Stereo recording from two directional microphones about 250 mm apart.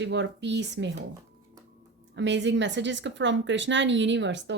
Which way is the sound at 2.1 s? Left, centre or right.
Right.